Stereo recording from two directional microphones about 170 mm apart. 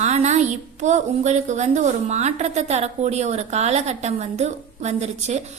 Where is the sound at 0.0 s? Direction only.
40° right (ahead or behind).